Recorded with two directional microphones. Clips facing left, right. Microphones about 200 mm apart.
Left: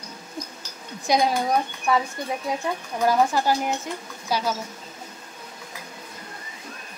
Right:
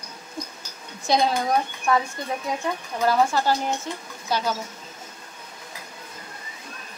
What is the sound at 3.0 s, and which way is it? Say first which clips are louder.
Speech: even; 15° left (ahead or behind).